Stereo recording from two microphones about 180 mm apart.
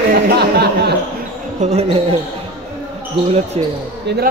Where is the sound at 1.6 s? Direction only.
35° right (ahead or behind).